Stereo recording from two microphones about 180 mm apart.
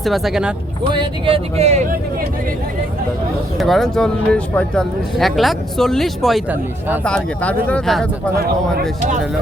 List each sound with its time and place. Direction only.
0.0 s speech: centre (ahead or behind)
0.9 s speech: 30° right (ahead or behind)
3.6 s speech: centre (ahead or behind)